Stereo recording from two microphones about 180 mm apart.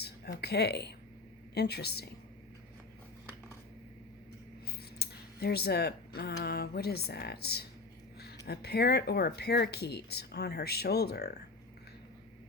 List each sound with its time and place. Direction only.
0.0 s speech: 65° left (ahead or behind)
4.9 s speech: 60° left (ahead or behind)